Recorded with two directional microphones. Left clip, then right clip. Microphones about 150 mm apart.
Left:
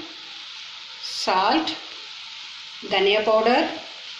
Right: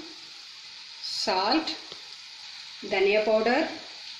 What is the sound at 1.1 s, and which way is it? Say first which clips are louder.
Speech: left 5 dB; 55° right (ahead or behind).